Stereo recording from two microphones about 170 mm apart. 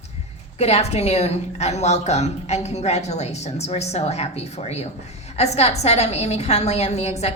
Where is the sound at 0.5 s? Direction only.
40° left (ahead or behind).